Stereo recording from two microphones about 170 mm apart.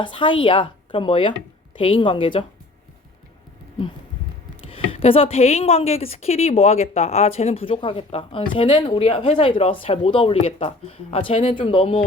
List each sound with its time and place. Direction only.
0.0 s speech: 30° left (ahead or behind)
4.7 s speech: 35° left (ahead or behind)